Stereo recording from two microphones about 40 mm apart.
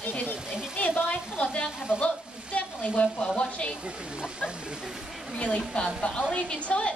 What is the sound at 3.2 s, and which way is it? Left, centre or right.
Speech, left.